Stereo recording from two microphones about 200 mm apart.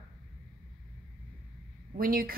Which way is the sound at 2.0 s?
45° right (ahead or behind).